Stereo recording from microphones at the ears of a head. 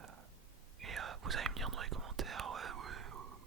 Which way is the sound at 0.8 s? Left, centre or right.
Right.